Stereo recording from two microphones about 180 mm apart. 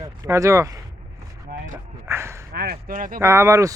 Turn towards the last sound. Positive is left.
turn(degrees=-15)  # may be behind; listen again after turning